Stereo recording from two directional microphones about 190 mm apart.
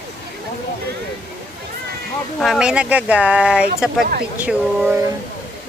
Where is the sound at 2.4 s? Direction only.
Centre (ahead or behind).